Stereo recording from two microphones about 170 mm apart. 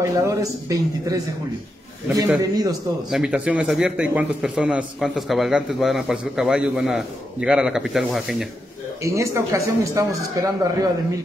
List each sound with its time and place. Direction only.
0.0 s a man's voice: 20° right (ahead or behind)
2.4 s a man's voice: 20° right (ahead or behind)
3.1 s a man's voice: 5° right (ahead or behind)
9.0 s a man's voice: 15° right (ahead or behind)